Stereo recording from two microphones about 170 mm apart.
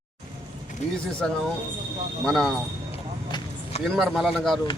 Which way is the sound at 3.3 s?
25° left (ahead or behind).